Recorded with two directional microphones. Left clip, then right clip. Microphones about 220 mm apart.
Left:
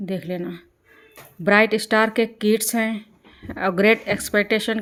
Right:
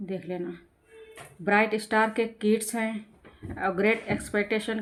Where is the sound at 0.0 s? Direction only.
50° left (ahead or behind).